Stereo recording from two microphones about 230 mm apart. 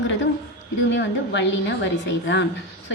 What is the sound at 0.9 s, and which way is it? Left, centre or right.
A woman's voice, left.